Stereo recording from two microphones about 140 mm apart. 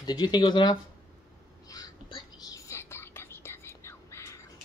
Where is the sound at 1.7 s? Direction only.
25° left (ahead or behind).